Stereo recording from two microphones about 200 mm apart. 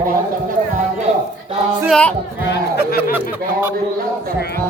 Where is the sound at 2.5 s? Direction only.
50° left (ahead or behind).